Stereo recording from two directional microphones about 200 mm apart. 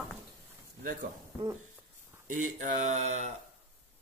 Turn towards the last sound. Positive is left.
turn(degrees=-35)  # may be behind; listen again after turning